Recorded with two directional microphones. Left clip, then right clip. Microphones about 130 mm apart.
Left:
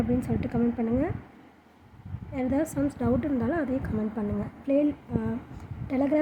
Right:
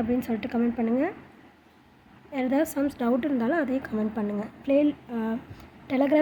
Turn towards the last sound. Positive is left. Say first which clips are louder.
# right 3 dB
turn(degrees=-15)  # may be behind; listen again after turning